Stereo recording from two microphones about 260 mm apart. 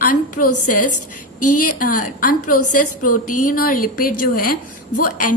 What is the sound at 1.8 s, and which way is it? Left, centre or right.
Speech, left.